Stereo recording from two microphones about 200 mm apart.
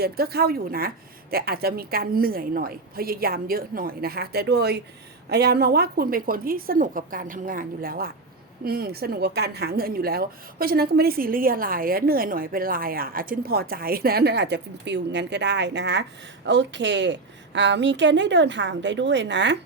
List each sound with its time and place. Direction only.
0.0 s a woman's voice: 50° right (ahead or behind)